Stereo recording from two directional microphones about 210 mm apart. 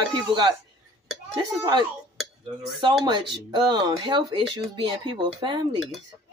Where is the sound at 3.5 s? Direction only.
20° right (ahead or behind).